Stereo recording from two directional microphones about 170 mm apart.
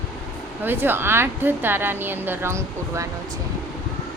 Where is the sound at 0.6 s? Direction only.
10° right (ahead or behind).